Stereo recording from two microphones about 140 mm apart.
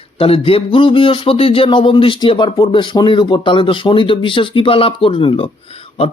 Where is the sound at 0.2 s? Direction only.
40° left (ahead or behind).